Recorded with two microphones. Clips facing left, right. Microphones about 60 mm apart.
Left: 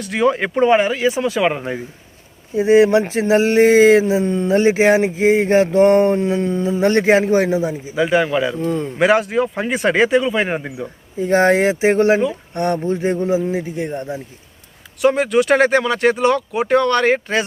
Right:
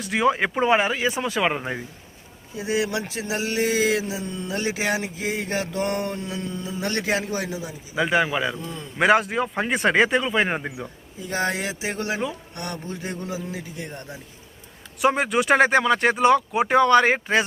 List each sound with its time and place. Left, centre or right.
0.0 s speech: centre
2.6 s speech: left
7.9 s speech: centre
8.6 s a man's voice: left
9.0 s speech: centre
11.2 s a man's voice: left
15.0 s speech: centre